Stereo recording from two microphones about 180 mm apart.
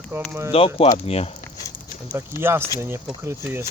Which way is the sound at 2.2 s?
15° right (ahead or behind).